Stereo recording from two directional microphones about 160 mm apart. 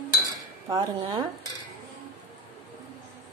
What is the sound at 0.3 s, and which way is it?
Cutlery, 25° right (ahead or behind).